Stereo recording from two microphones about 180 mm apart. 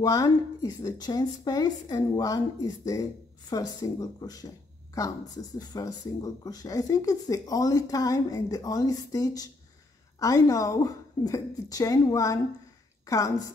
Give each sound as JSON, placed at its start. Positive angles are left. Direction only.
{"t": 0.0, "sound": "a woman's voice", "side_deg": 20}